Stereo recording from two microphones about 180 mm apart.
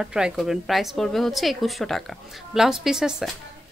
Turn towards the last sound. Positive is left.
turn(degrees=-5)  # may be behind; listen again after turning